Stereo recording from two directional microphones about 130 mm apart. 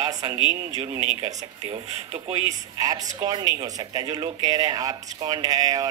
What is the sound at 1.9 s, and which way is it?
Speech, 50° right (ahead or behind).